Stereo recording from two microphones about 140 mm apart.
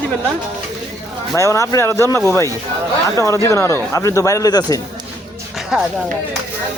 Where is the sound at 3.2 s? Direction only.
20° left (ahead or behind).